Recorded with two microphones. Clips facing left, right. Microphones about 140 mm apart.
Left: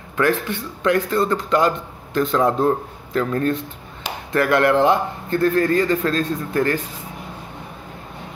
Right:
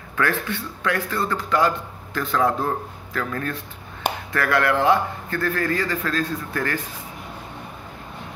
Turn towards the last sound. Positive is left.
turn(degrees=25)  # may be behind; listen again after turning